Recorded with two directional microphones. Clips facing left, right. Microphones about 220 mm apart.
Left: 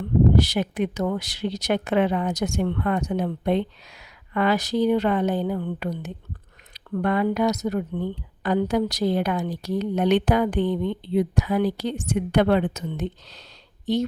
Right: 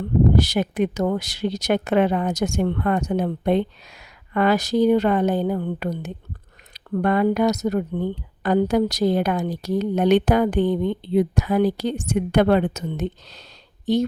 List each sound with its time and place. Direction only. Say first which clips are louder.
0.0 s speech: right 1 dB; 45° right (ahead or behind)